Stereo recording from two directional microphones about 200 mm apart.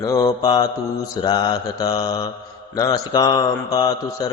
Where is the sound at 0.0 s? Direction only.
15° left (ahead or behind).